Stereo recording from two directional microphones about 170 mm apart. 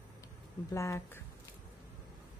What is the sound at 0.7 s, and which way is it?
Speech, 15° left (ahead or behind).